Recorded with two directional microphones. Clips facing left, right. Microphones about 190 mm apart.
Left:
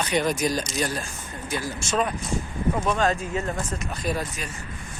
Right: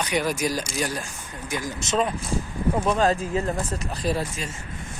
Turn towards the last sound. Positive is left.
turn(degrees=-30)  # may be behind; listen again after turning